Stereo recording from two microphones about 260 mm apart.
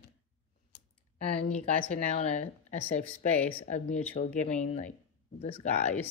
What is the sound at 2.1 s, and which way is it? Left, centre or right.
Speech, left.